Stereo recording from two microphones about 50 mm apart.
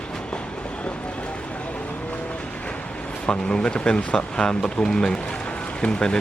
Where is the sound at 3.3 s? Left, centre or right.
Centre.